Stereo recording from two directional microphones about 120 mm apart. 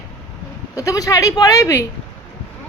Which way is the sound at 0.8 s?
30° left (ahead or behind).